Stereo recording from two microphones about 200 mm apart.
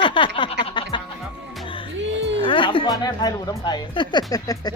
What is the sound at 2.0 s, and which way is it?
Music, 65° right (ahead or behind).